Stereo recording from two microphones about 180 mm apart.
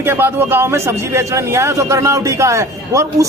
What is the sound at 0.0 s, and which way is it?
Speech, 10° right (ahead or behind).